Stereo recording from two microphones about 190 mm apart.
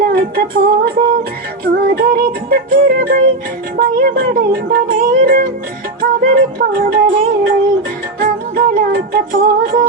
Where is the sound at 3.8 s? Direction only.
50° right (ahead or behind).